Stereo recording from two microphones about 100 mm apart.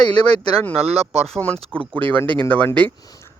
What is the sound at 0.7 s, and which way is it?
Speech, 90° right.